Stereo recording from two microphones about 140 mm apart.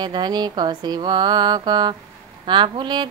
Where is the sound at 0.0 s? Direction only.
30° right (ahead or behind).